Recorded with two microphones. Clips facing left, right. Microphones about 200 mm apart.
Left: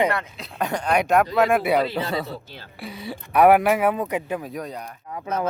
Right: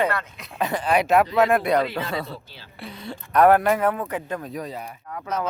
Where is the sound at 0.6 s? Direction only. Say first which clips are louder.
Even; 5° right (ahead or behind).